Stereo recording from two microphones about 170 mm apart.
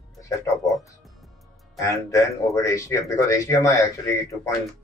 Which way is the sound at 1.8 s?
20° left (ahead or behind).